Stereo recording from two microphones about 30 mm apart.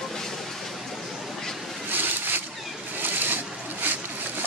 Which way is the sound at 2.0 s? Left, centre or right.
Right.